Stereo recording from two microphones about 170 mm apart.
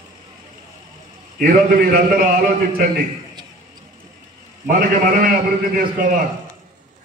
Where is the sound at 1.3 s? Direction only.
60° right (ahead or behind).